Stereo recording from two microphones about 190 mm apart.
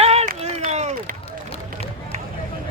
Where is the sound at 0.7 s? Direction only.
35° right (ahead or behind).